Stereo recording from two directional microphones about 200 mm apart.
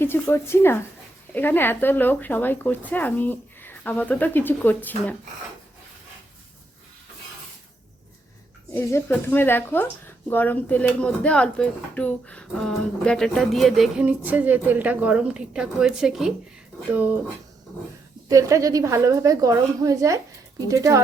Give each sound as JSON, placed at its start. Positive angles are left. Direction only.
{"t": 0.0, "sound": "speech", "side_deg": 10}
{"t": 8.7, "sound": "speech", "side_deg": 10}
{"t": 18.3, "sound": "a woman's voice", "side_deg": -15}